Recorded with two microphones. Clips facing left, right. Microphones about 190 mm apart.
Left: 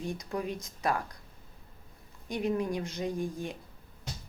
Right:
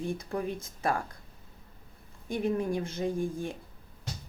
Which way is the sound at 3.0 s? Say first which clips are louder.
Right 3 dB; 35° right (ahead or behind).